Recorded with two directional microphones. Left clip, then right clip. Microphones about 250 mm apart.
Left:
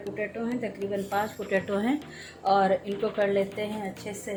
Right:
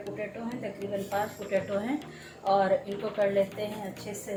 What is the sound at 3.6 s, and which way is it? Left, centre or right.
Speech, left.